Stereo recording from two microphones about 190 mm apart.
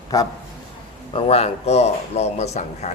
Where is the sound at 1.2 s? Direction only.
30° left (ahead or behind).